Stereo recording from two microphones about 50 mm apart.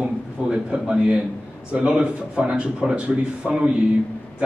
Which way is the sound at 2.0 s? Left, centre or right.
Right.